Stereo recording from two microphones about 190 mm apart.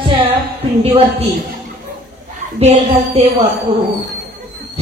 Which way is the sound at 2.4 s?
35° right (ahead or behind).